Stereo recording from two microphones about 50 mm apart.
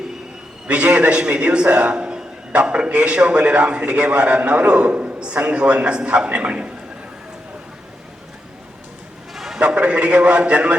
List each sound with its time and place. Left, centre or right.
0.7 s a man's voice: right
9.3 s a sound: centre
9.6 s a man's voice: right